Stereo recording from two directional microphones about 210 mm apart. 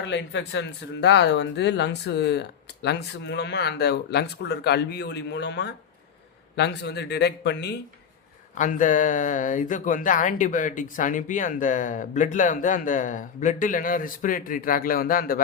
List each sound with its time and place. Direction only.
0.0 s speech: 60° left (ahead or behind)
8.5 s speech: 40° left (ahead or behind)